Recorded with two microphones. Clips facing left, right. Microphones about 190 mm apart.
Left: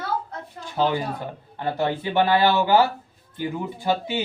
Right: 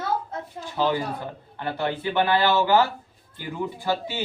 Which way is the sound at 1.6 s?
20° left (ahead or behind).